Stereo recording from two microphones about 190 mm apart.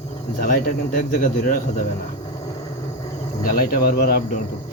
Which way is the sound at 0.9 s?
45° left (ahead or behind).